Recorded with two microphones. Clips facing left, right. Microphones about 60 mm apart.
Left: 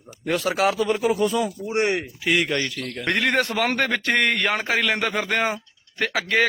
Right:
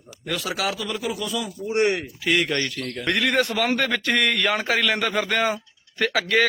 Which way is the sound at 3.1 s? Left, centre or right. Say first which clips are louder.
Even; left.